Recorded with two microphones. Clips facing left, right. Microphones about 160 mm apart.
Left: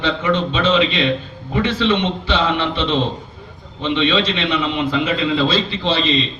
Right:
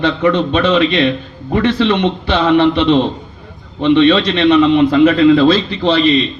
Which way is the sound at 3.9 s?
45° right (ahead or behind).